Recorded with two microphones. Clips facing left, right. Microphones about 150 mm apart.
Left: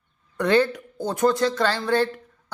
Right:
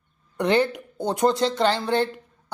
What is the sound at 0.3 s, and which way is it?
A woman's voice, 20° right (ahead or behind).